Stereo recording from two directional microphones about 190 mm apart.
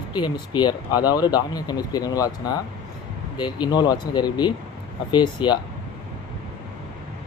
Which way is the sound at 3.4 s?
25° left (ahead or behind).